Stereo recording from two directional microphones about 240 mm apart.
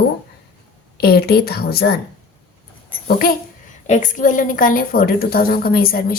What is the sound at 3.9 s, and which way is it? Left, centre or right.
A woman's voice, left.